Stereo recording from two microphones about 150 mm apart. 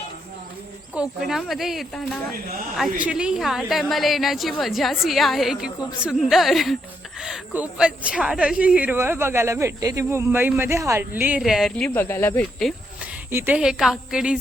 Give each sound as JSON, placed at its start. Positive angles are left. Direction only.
{"t": 0.9, "sound": "a woman's voice", "side_deg": 0}
{"t": 11.9, "sound": "speech", "side_deg": 15}
{"t": 13.0, "sound": "speech", "side_deg": -10}